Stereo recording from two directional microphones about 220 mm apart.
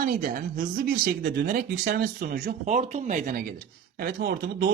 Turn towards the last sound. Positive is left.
turn(degrees=-45)  # may be behind; listen again after turning